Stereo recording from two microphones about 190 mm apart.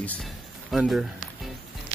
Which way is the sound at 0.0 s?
5° left (ahead or behind).